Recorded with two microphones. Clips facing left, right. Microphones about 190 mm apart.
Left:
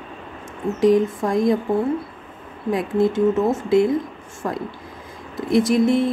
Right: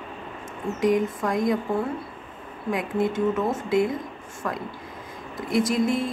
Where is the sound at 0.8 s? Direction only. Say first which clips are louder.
Left 6 dB; 30° left (ahead or behind).